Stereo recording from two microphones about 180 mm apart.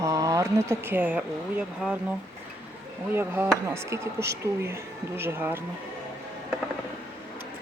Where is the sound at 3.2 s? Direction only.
10° right (ahead or behind).